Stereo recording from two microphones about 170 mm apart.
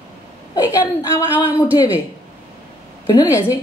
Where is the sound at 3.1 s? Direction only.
15° left (ahead or behind).